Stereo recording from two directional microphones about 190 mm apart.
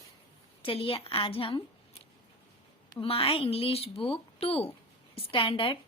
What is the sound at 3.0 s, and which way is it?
A woman's voice, 30° left (ahead or behind).